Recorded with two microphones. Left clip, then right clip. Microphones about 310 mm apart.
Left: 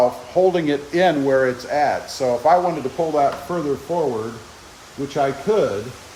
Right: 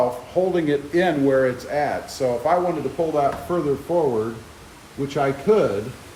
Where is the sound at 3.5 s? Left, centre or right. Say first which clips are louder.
Right 1 dB; left.